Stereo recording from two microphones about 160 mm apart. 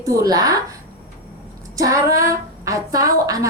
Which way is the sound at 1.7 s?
20° right (ahead or behind).